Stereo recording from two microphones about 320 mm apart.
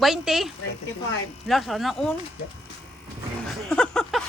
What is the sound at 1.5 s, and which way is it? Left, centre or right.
Speech, centre.